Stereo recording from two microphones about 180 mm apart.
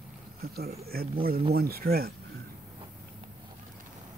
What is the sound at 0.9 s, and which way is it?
Speech, 55° right (ahead or behind).